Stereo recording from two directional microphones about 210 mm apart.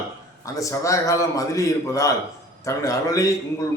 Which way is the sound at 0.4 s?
15° left (ahead or behind).